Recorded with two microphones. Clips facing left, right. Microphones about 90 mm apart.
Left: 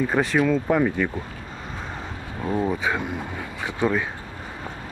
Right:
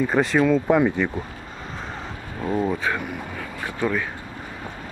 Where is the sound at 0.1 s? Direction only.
Centre (ahead or behind).